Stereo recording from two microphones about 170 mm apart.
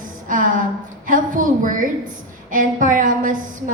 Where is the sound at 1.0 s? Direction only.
50° right (ahead or behind).